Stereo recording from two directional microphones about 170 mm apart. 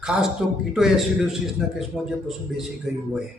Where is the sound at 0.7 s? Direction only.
Centre (ahead or behind).